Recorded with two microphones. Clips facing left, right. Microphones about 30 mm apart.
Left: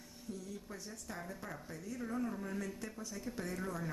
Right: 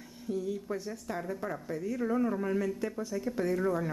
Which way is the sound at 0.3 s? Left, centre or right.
Right.